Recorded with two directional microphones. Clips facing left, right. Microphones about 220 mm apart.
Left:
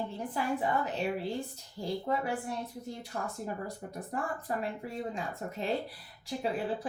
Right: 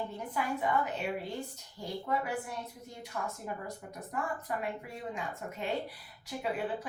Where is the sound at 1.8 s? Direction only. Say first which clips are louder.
Left 2 dB; 30° left (ahead or behind).